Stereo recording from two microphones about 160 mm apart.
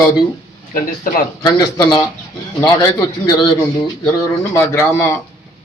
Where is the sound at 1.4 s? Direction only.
25° left (ahead or behind).